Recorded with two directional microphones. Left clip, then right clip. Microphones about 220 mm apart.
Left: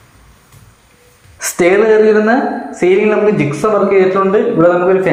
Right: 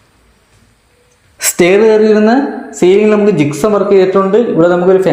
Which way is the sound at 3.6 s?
55° right (ahead or behind).